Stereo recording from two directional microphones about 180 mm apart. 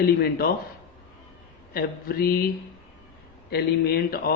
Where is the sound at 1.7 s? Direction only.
55° left (ahead or behind).